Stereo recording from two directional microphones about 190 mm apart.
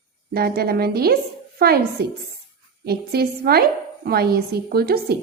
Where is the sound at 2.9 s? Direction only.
55° right (ahead or behind).